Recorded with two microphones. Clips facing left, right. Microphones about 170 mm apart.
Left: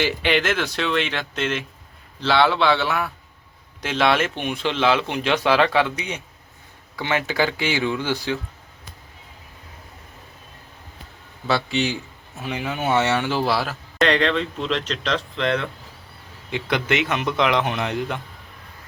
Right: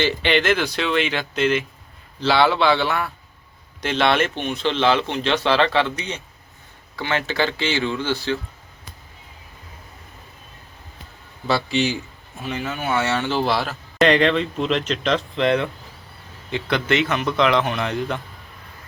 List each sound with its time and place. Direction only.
0.0 s speech: 5° left (ahead or behind)
11.4 s speech: centre (ahead or behind)
12.4 s speech: 10° left (ahead or behind)
12.8 s speech: 20° left (ahead or behind); by 14.1 s 5° left (ahead or behind)
14.1 s speech: 10° right (ahead or behind)
16.5 s speech: 15° left (ahead or behind)